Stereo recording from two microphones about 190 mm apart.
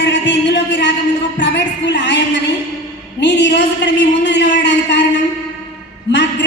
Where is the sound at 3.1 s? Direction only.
65° left (ahead or behind).